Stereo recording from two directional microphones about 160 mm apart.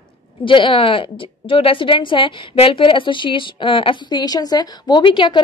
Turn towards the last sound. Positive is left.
turn(degrees=30)  # may be behind; listen again after turning